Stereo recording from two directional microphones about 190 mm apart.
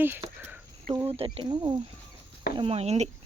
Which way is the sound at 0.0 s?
10° right (ahead or behind).